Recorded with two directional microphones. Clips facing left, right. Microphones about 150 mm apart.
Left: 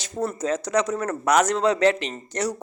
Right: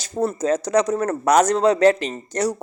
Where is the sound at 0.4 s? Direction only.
35° right (ahead or behind).